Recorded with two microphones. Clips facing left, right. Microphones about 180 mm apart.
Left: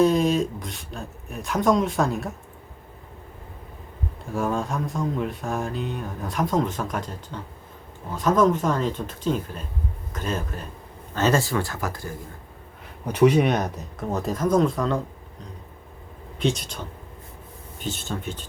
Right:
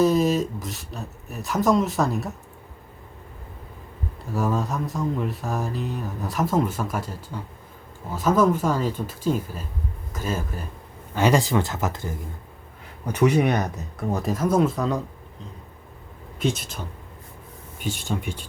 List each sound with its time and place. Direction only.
0.0 s speech: 5° right (ahead or behind)
4.3 s speech: centre (ahead or behind)
8.1 s speech: 5° right (ahead or behind)
13.3 s speech: 10° right (ahead or behind)
16.4 s speech: 5° right (ahead or behind)